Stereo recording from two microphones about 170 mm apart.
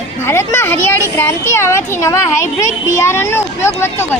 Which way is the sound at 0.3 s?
15° left (ahead or behind).